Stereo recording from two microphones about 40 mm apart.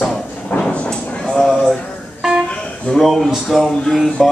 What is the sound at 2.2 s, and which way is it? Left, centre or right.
Music, centre.